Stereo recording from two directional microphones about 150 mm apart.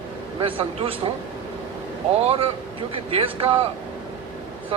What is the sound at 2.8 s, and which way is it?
Speech, 35° right (ahead or behind).